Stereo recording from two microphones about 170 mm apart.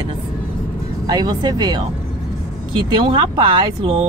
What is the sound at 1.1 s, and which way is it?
Speech, 25° right (ahead or behind).